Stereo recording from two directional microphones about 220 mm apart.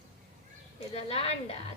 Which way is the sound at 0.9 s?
25° left (ahead or behind).